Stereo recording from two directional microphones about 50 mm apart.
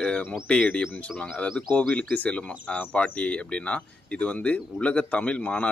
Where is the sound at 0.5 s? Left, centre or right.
Left.